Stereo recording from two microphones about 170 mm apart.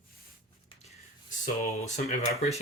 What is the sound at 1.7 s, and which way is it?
Speech, 40° left (ahead or behind).